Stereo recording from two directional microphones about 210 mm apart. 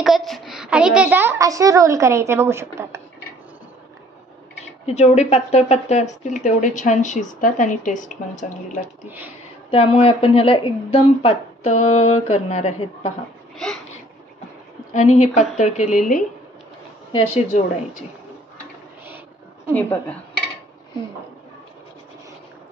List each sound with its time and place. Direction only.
0.0 s a child's voice: centre (ahead or behind)
4.8 s a woman's voice: 30° left (ahead or behind)
13.6 s a sound: centre (ahead or behind)
14.9 s speech: 35° left (ahead or behind)
17.1 s a woman's voice: 30° left (ahead or behind)
19.7 s speech: 10° left (ahead or behind)